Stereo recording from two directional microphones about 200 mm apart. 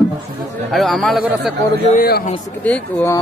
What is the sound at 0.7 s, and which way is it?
Speech, centre (ahead or behind).